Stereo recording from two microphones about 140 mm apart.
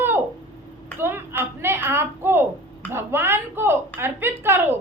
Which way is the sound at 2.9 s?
15° right (ahead or behind).